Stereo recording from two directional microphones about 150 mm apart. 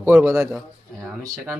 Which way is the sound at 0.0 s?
15° right (ahead or behind).